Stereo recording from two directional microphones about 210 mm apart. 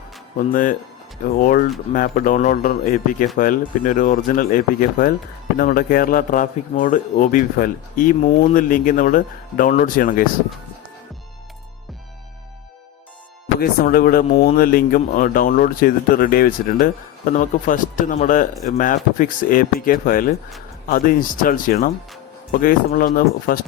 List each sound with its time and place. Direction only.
0.5 s speech: 40° left (ahead or behind)
13.6 s speech: 45° left (ahead or behind)